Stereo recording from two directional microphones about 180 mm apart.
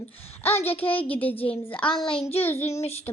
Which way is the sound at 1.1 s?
10° left (ahead or behind).